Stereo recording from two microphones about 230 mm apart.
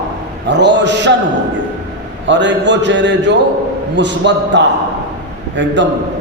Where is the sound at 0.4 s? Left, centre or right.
Right.